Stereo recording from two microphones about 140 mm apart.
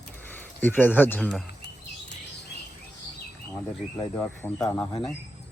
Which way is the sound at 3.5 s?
25° left (ahead or behind).